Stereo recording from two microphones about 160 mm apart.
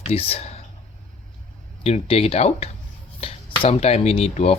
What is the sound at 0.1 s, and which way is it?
Speech, 40° left (ahead or behind).